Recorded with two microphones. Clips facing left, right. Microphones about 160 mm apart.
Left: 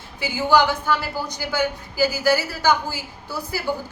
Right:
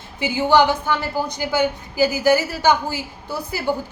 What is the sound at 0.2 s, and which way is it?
A woman's voice, 20° right (ahead or behind).